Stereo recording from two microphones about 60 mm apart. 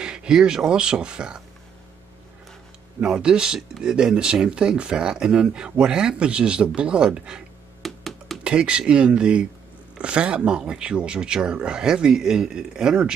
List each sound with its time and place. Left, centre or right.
0.0 s speech: centre
3.0 s speech: centre
7.8 s music: centre
8.5 s speech: centre